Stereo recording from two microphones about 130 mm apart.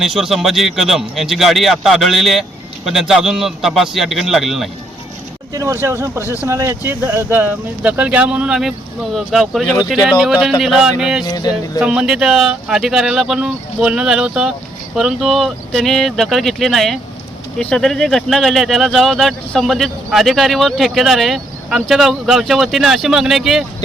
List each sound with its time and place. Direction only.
0.0 s speech: centre (ahead or behind)
5.5 s speech: 20° right (ahead or behind); by 11.3 s 5° right (ahead or behind)
11.3 s music: 30° left (ahead or behind)
11.8 s speech: 5° right (ahead or behind)